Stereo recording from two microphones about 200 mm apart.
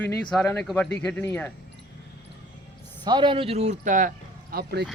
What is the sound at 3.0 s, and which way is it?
Speech, 20° right (ahead or behind).